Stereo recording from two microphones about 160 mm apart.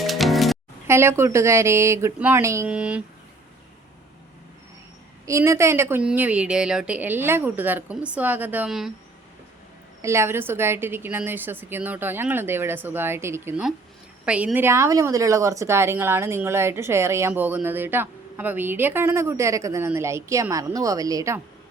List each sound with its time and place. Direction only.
0.0 s music: centre (ahead or behind)
0.9 s a woman's voice: 15° right (ahead or behind)
5.2 s a woman's voice: 20° right (ahead or behind)
10.0 s a woman's voice: 15° right (ahead or behind)